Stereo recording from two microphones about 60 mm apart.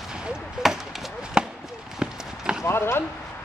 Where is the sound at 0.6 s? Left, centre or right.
Centre.